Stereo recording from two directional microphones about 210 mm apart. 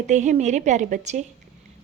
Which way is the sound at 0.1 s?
35° right (ahead or behind).